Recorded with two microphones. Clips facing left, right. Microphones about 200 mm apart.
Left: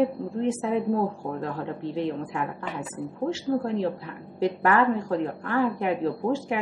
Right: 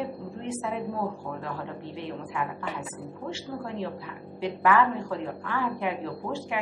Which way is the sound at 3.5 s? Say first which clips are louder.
Left 6 dB; 50° left (ahead or behind).